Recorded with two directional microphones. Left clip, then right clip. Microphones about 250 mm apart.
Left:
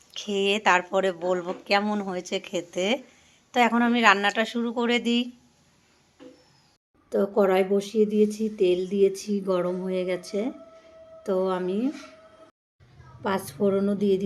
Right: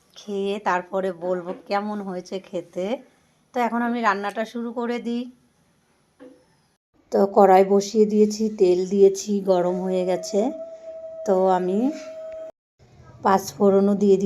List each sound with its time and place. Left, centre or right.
0.1 s speech: centre
7.1 s a woman's voice: centre
13.2 s speech: centre